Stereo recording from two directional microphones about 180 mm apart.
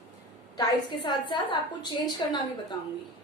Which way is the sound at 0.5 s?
20° left (ahead or behind).